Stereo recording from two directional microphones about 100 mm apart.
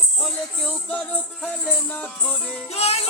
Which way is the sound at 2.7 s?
90° left.